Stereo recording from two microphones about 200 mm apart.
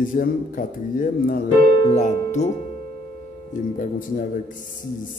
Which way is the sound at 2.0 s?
35° left (ahead or behind).